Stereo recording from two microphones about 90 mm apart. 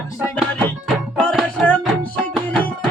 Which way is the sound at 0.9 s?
5° left (ahead or behind).